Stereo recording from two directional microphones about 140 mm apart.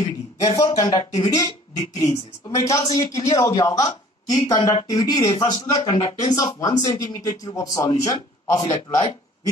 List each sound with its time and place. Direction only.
0.6 s speech: 25° left (ahead or behind)